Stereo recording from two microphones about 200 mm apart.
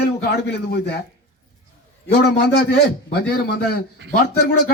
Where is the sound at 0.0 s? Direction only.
55° left (ahead or behind).